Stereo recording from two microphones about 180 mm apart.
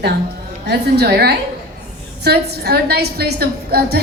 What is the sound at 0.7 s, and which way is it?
A woman's voice, 65° right (ahead or behind).